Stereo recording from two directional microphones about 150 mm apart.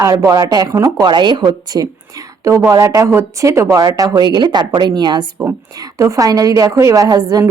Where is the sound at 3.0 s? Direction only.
20° right (ahead or behind).